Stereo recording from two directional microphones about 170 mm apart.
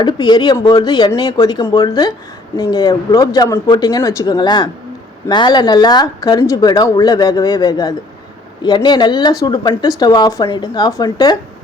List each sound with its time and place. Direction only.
0.0 s speech: 25° left (ahead or behind)